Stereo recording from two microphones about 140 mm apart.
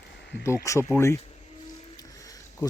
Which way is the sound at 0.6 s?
20° left (ahead or behind).